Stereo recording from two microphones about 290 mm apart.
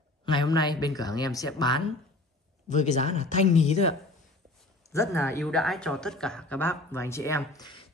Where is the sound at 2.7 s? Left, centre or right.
Left.